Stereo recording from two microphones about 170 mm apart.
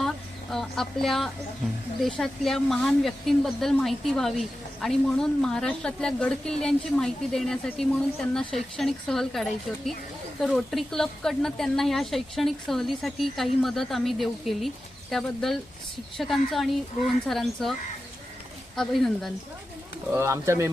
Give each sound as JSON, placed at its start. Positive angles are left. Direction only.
{"t": 0.5, "sound": "speech", "side_deg": 0}
{"t": 18.8, "sound": "speech", "side_deg": 0}
{"t": 20.1, "sound": "speech", "side_deg": -15}